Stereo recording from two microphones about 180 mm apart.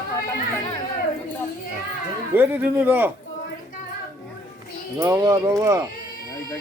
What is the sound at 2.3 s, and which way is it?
Speech, 10° right (ahead or behind).